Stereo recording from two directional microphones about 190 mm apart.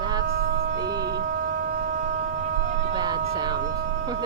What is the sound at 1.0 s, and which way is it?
Shofar, 55° right (ahead or behind).